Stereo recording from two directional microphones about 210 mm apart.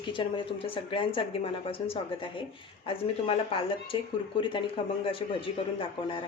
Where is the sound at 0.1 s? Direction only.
25° left (ahead or behind).